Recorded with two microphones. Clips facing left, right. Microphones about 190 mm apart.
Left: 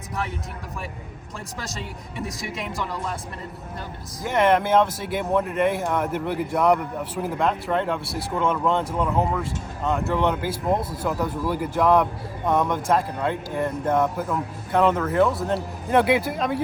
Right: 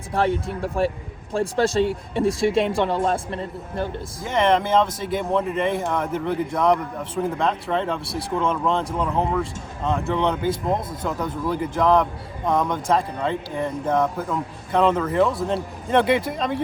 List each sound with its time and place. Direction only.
0.1 s speech: 30° right (ahead or behind)
4.2 s speech: 5° left (ahead or behind)